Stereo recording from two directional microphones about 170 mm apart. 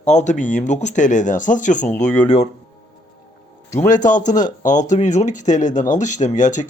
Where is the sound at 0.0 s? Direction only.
45° left (ahead or behind).